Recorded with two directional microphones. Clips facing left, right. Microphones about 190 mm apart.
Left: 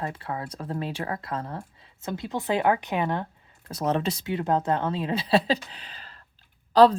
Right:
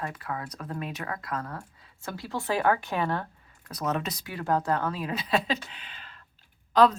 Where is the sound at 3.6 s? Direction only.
30° left (ahead or behind).